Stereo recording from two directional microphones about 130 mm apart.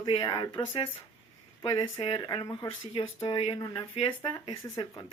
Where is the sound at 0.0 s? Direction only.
40° left (ahead or behind).